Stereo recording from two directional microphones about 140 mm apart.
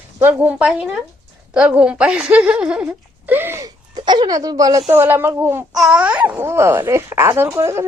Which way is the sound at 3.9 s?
30° right (ahead or behind).